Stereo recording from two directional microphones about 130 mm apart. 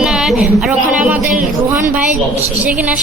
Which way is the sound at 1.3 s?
80° right.